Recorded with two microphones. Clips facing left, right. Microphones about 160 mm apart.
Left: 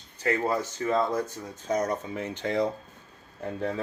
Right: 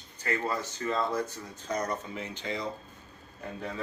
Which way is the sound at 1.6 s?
45° left (ahead or behind).